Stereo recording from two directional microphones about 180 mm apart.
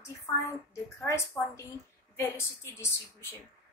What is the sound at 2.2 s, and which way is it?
A woman's voice, 15° left (ahead or behind).